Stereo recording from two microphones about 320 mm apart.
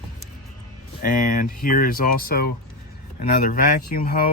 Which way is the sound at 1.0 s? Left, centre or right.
Left.